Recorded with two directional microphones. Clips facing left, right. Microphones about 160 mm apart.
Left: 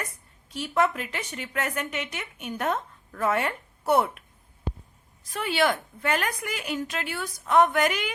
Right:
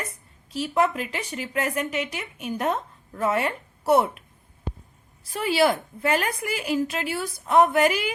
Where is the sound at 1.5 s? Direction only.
30° right (ahead or behind).